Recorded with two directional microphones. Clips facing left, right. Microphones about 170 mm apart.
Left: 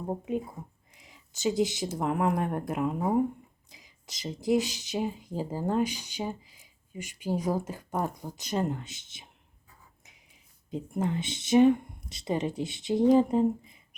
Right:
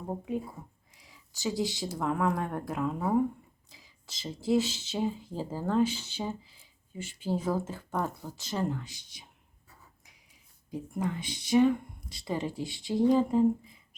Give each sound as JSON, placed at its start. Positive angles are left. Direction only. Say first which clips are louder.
{"t": 0.1, "sound": "speech", "louder": "left 2 dB", "side_deg": 15}
{"t": 10.7, "sound": "speech", "louder": "left 3 dB", "side_deg": 20}